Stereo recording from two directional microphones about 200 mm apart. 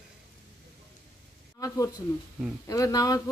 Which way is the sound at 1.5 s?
15° left (ahead or behind).